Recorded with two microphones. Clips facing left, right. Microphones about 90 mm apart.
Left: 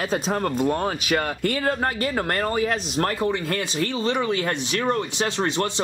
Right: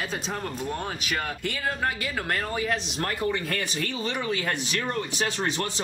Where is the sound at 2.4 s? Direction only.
60° left (ahead or behind).